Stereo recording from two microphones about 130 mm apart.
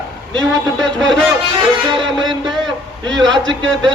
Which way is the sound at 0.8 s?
5° left (ahead or behind).